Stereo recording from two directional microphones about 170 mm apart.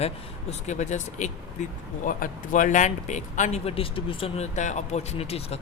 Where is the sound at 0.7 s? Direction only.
45° left (ahead or behind).